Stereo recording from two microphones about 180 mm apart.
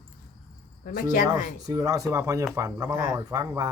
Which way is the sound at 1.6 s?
20° right (ahead or behind).